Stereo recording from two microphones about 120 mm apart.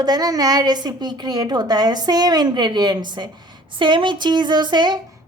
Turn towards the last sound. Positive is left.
turn(degrees=-40)  # may be behind; listen again after turning